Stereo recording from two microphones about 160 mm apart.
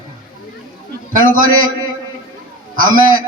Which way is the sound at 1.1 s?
60° right (ahead or behind).